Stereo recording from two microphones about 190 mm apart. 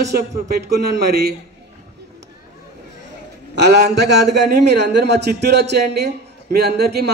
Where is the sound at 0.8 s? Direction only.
55° right (ahead or behind).